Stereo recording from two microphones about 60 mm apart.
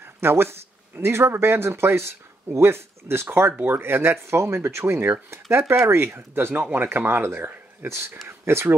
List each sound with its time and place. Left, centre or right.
0.0 s speech: right